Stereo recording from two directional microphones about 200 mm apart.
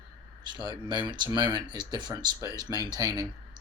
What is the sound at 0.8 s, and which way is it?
Speech, 25° right (ahead or behind).